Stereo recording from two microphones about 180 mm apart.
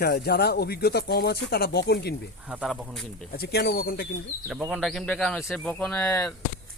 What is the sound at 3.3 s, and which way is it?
Speech, 60° left (ahead or behind).